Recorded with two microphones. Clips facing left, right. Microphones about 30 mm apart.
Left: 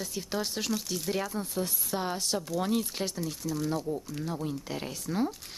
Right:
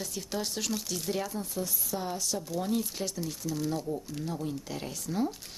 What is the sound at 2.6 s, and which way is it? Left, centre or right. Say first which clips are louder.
Speech: left 1 dB; left.